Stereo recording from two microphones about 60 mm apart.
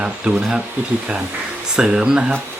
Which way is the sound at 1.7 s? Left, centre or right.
Centre.